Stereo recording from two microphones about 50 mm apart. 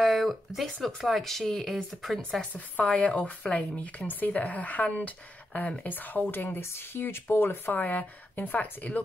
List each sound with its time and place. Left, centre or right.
0.0 s speech: centre
2.5 s speech: left
6.6 s speech: left
7.7 s speech: left